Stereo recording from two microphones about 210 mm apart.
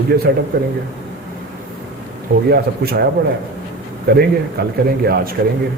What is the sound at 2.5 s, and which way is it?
Speech, 50° right (ahead or behind).